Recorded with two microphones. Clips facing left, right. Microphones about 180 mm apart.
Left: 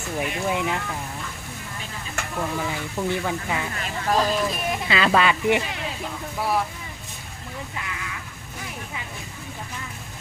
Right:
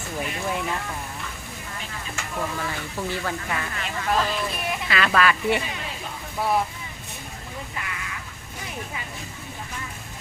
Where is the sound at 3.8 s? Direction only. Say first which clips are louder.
Left 2 dB; 40° left (ahead or behind).